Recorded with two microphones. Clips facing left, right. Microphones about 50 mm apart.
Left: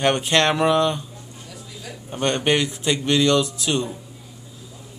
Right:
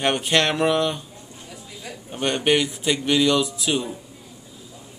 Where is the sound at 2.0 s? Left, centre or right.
Centre.